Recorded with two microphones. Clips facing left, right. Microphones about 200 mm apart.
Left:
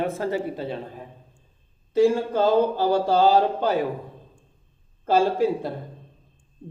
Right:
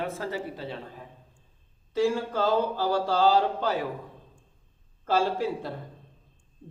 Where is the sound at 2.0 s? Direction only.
20° left (ahead or behind).